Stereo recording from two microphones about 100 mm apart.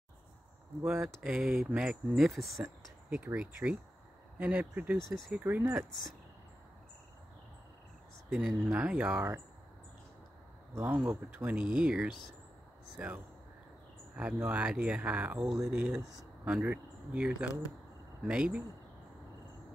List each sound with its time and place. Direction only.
1.0 s speech: 5° right (ahead or behind)
8.3 s speech: 5° right (ahead or behind)
11.1 s speech: 15° right (ahead or behind)